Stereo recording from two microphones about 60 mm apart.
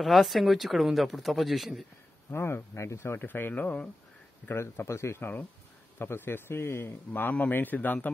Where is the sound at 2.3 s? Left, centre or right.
Left.